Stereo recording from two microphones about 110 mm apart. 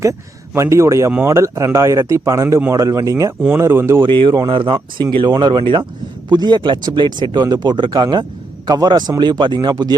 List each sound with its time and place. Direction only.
0.0 s speech: 30° right (ahead or behind)
4.0 s speech: 45° right (ahead or behind)